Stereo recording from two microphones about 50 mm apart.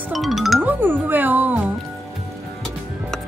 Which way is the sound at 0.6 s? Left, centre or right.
Right.